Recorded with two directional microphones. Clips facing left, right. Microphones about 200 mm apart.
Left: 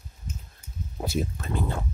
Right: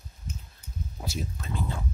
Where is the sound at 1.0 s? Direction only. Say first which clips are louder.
Left 7 dB; 55° left (ahead or behind).